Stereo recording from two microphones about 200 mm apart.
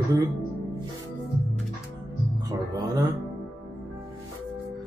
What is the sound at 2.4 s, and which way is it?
Speech, 20° right (ahead or behind).